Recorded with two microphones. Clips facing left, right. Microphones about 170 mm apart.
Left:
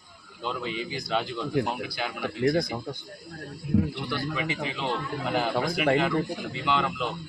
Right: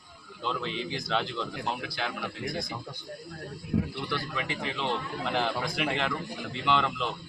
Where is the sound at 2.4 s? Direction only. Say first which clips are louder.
Left 14 dB; 55° left (ahead or behind).